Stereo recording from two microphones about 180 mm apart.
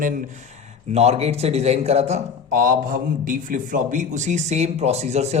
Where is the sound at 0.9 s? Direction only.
35° right (ahead or behind).